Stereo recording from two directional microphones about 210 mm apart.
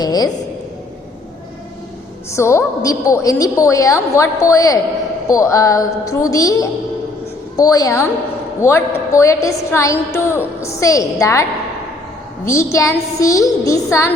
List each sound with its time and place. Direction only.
0.0 s a woman's voice: 20° left (ahead or behind)
2.3 s a woman's voice: 15° left (ahead or behind)
12.7 s a woman's voice: 15° left (ahead or behind)